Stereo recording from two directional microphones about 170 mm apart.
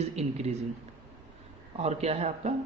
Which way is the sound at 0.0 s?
40° right (ahead or behind).